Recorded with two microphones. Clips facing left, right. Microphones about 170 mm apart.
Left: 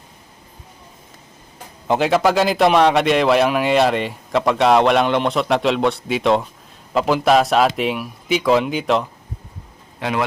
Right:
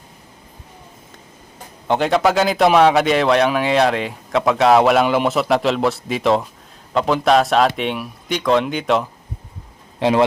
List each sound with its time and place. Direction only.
1.9 s a man's voice: centre (ahead or behind)
10.0 s speech: 30° right (ahead or behind)